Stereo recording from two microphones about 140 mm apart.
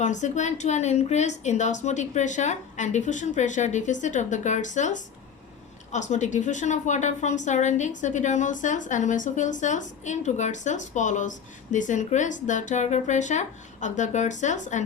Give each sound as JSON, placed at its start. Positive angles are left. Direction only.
{"t": 0.0, "sound": "a woman's voice", "side_deg": 60}